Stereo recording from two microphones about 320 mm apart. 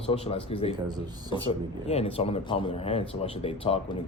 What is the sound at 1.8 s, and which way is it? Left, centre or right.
Speech, centre.